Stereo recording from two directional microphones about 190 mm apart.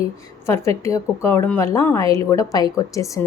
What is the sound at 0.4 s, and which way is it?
A woman's voice, 15° left (ahead or behind).